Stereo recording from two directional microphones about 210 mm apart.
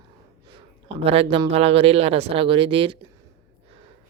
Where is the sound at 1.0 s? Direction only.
30° right (ahead or behind).